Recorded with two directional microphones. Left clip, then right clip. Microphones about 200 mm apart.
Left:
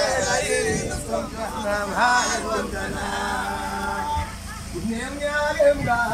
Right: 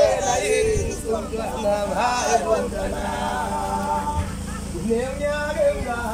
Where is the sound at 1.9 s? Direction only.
15° right (ahead or behind).